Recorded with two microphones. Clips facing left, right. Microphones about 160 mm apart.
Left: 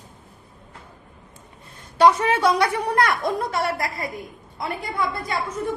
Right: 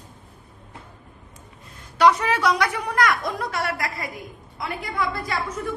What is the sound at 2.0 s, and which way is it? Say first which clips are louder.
A woman's voice: left 2 dB; 25° left (ahead or behind).